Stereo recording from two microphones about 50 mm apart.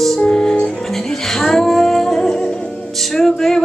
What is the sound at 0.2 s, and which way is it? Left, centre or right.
Music, centre.